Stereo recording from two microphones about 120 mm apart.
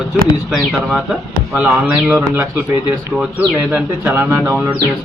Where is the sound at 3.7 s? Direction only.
15° right (ahead or behind).